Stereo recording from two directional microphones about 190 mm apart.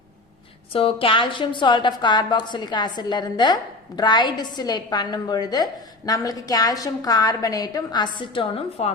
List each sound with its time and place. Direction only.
0.7 s a woman's voice: 30° left (ahead or behind)